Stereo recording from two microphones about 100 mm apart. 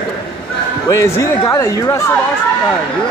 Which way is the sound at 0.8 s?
30° left (ahead or behind).